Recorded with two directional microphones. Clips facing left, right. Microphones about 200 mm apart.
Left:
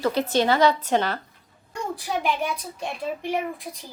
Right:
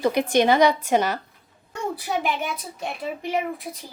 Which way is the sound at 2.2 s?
5° right (ahead or behind).